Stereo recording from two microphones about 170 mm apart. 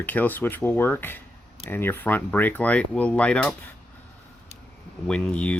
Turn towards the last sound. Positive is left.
turn(degrees=5)  # may be behind; listen again after turning